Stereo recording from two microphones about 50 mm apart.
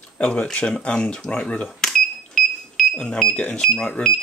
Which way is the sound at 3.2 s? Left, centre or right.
Centre.